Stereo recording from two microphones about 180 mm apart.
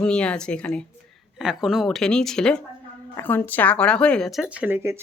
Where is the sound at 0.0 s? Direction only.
5° left (ahead or behind).